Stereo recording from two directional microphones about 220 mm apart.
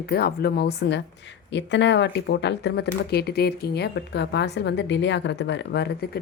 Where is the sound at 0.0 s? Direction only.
45° left (ahead or behind).